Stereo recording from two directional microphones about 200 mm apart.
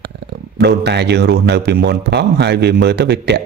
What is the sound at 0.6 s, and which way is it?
A man's voice, 55° right (ahead or behind).